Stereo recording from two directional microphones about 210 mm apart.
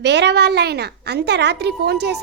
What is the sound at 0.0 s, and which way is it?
A woman's voice, 55° right (ahead or behind).